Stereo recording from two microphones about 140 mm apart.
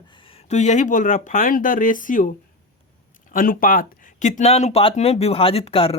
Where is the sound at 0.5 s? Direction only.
55° left (ahead or behind).